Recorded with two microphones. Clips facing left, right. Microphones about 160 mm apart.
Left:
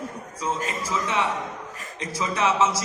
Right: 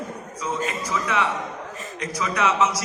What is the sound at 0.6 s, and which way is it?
A man's voice, 30° left (ahead or behind).